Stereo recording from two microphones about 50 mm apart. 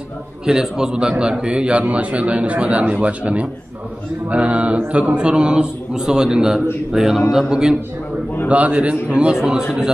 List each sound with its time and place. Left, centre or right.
0.5 s a man's voice: centre
8.5 s a man's voice: right; by 9.7 s centre